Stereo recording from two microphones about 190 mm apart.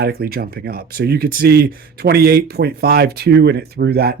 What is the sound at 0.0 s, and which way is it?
Speech, 55° right (ahead or behind).